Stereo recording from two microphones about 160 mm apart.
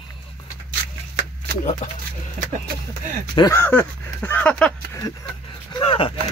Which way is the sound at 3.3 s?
20° left (ahead or behind).